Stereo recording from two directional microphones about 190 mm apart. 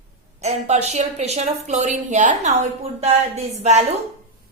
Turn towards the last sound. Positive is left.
turn(degrees=-35)  # may be behind; listen again after turning